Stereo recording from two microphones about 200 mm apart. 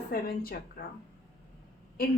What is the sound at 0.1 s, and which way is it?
Speech, 50° left (ahead or behind).